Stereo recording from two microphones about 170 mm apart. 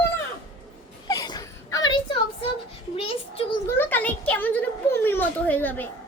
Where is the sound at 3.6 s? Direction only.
10° left (ahead or behind).